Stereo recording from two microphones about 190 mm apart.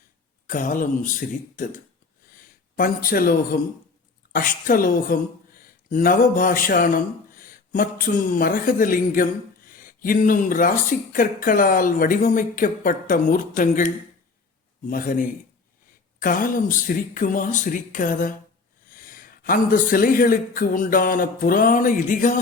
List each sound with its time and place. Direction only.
0.4 s a woman's voice: 45° left (ahead or behind)